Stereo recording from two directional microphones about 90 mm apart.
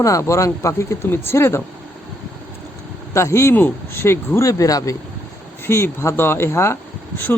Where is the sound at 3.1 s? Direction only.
30° left (ahead or behind).